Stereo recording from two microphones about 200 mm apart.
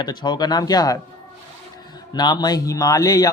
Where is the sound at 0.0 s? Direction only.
20° left (ahead or behind).